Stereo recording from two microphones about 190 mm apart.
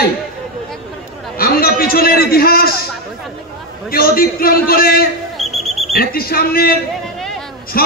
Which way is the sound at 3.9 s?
50° left (ahead or behind).